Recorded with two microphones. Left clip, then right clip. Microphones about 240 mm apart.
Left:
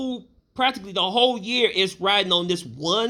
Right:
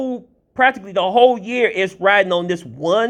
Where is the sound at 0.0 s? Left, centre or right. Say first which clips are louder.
Right 6 dB; centre.